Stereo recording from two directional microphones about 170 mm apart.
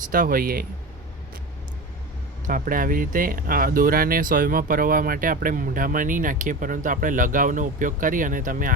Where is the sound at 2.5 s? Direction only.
55° right (ahead or behind).